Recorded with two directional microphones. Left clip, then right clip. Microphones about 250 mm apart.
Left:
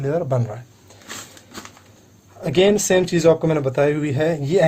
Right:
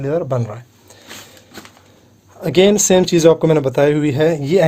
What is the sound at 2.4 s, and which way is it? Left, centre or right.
Speech, right.